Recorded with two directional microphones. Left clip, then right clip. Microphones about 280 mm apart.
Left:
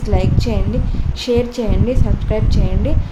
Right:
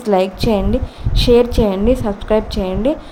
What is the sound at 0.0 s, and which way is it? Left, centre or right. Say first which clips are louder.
A woman's voice: right 6 dB; centre.